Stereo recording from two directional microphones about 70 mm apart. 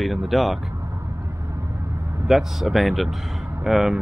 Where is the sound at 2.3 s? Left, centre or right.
Centre.